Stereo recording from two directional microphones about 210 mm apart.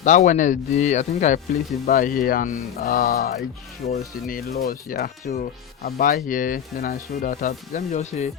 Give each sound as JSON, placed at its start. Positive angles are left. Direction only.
{"t": 0.0, "sound": "speech", "side_deg": 35}